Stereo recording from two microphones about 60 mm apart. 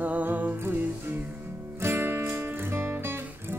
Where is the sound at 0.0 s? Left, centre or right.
Right.